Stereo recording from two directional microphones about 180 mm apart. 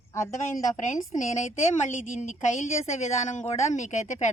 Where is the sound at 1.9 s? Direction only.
40° left (ahead or behind).